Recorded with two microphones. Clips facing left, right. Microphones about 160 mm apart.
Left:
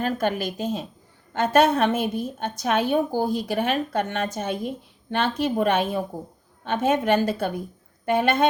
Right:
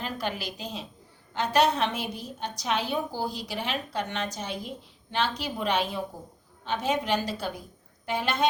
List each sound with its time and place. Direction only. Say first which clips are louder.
0.0 s a woman's voice: left 8 dB; 50° left (ahead or behind)